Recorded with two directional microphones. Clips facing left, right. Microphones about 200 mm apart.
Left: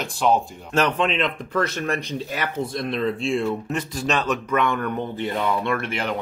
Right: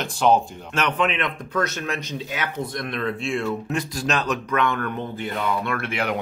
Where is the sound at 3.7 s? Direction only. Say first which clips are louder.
Even; centre (ahead or behind).